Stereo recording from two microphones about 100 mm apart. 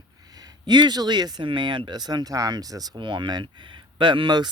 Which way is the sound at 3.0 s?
50° right (ahead or behind).